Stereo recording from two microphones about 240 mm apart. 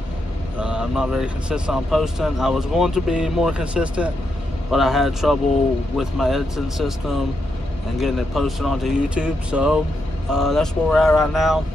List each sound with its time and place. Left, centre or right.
0.6 s speech: centre